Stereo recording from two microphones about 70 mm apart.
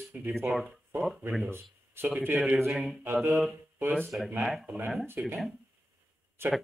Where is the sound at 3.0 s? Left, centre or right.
Right.